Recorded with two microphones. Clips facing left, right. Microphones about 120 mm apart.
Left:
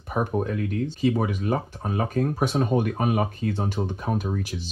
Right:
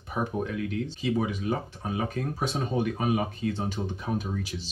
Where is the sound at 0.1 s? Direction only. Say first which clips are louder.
Left 4 dB; 50° left (ahead or behind).